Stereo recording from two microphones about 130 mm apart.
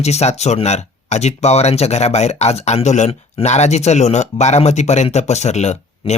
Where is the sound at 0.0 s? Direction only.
55° left (ahead or behind).